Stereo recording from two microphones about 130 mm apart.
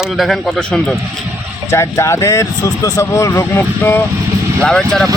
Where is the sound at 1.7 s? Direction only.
20° left (ahead or behind).